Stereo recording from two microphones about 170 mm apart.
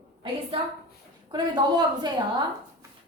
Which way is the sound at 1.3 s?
25° right (ahead or behind).